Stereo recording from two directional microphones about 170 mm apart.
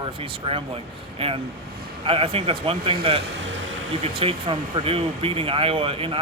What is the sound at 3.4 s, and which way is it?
Music, 90° right.